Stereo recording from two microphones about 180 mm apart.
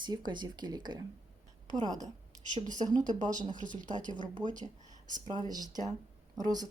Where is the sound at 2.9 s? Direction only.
45° right (ahead or behind).